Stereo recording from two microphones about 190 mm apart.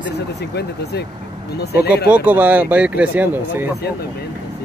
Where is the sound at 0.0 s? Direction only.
60° left (ahead or behind).